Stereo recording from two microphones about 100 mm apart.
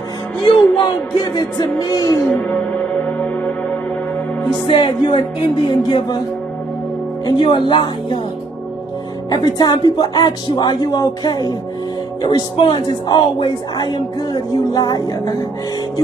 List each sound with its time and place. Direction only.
0.5 s speech: 45° left (ahead or behind)
4.6 s music: 55° left (ahead or behind)
5.7 s speech: 50° left (ahead or behind)
7.2 s speech: 55° left (ahead or behind)
9.3 s speech: 40° left (ahead or behind)
14.3 s music: 45° left (ahead or behind)